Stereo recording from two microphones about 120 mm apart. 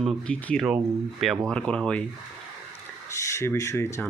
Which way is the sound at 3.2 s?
25° left (ahead or behind).